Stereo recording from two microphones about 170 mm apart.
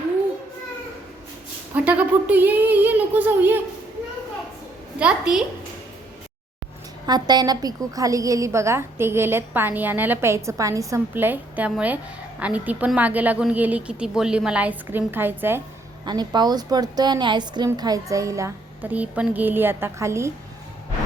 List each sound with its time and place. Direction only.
1.7 s a woman's voice: 10° right (ahead or behind)
4.9 s a child's voice: 5° right (ahead or behind)
7.0 s a woman's voice: 25° right (ahead or behind)
16.0 s a woman's voice: 25° right (ahead or behind)